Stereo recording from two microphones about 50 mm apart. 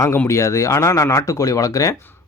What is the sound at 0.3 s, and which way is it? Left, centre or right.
Speech, left.